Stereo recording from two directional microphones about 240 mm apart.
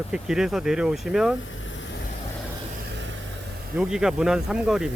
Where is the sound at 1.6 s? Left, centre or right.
Left.